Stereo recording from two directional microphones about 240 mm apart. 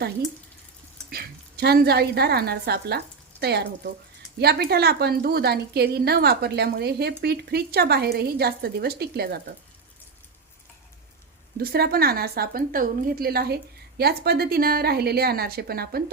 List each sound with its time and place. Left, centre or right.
1.1 s a woman's voice: right
11.5 s a woman's voice: right